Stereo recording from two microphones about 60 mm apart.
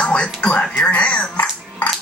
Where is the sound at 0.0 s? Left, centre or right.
Centre.